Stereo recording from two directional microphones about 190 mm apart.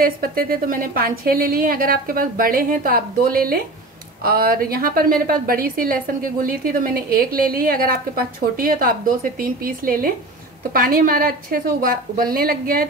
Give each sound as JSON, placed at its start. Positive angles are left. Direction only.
{"t": 0.0, "sound": "a woman's voice", "side_deg": -50}